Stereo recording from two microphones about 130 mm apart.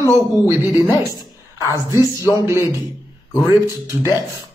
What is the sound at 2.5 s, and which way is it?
Speech, 20° right (ahead or behind).